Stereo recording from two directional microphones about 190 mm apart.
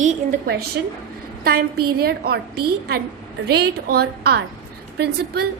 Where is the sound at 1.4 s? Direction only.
55° right (ahead or behind).